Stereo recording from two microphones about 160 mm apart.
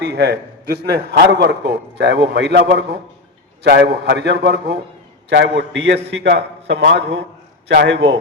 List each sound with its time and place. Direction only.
0.0 s a man's voice: 90° right